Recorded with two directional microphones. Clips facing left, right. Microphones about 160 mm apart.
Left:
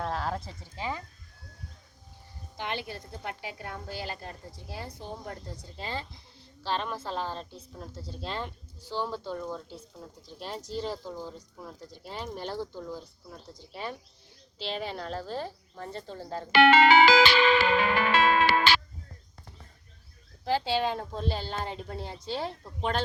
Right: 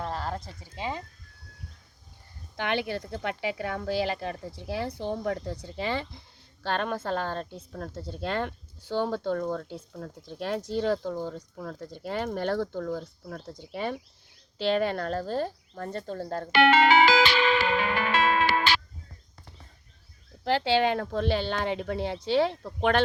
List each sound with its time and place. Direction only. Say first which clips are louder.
0.0 s sheep: left 1 dB; centre (ahead or behind)
0.8 s speech: right 1 dB; 25° right (ahead or behind)
2.6 s speech: right 7 dB; 70° right (ahead or behind)
6.6 s speech: right 3 dB; 55° right (ahead or behind)
16.5 s music: left 1 dB; 90° left
20.4 s speech: right 4 dB; 75° right (ahead or behind)